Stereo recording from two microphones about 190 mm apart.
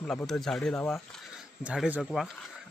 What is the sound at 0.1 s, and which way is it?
Speech, centre (ahead or behind).